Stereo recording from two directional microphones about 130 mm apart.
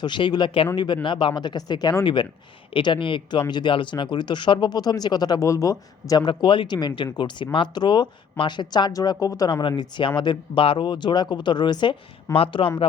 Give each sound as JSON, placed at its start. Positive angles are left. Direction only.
{"t": 0.0, "sound": "speech", "side_deg": 35}